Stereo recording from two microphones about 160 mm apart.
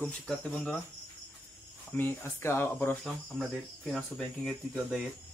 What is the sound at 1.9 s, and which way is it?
Speech, 10° left (ahead or behind).